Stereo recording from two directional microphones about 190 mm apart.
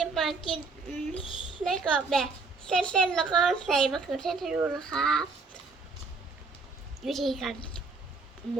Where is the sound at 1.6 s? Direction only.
Centre (ahead or behind).